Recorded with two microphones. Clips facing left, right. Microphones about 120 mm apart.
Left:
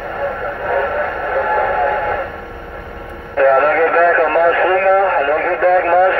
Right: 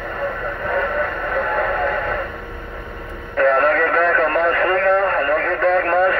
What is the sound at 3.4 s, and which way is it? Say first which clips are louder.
Radio: left 4 dB; 15° left (ahead or behind).